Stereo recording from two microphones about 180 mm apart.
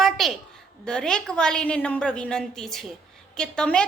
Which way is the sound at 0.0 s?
Centre (ahead or behind).